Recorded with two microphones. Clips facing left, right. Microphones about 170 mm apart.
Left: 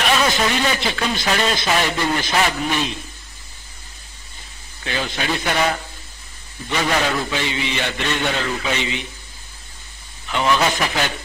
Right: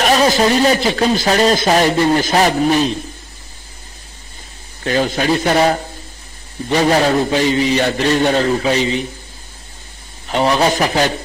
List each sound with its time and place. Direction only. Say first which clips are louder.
0.0 s a man's voice: right 6 dB; 40° right (ahead or behind)
4.8 s a man's voice: right 8 dB; 40° right (ahead or behind)
10.2 s a man's voice: right 4 dB; 35° right (ahead or behind)